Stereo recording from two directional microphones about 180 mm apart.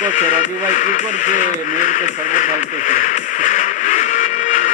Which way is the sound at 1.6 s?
45° left (ahead or behind).